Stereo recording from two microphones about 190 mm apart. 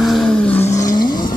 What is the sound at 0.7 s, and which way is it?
Vehicle, 20° left (ahead or behind).